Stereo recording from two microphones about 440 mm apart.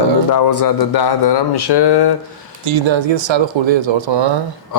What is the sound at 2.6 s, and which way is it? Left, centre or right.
Speech, right.